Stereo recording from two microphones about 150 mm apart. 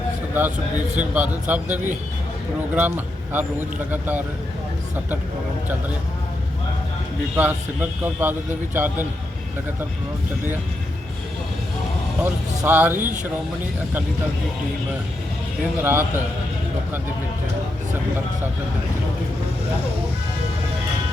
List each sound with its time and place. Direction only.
0.9 s a man's voice: 10° right (ahead or behind)
7.3 s a man's voice: 15° right (ahead or behind)
12.2 s a man's voice: 10° right (ahead or behind)
15.8 s a man's voice: 15° right (ahead or behind)